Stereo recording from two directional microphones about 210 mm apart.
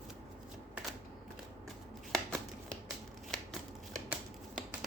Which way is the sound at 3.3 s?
Centre (ahead or behind).